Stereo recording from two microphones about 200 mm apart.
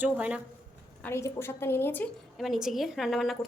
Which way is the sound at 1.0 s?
15° left (ahead or behind).